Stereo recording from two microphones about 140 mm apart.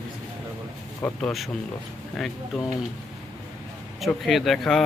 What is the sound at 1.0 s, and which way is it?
Speech, 5° left (ahead or behind).